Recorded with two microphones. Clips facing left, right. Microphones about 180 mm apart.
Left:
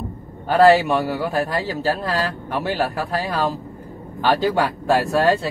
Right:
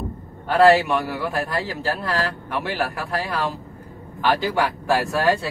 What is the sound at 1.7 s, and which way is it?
Speech, 30° left (ahead or behind).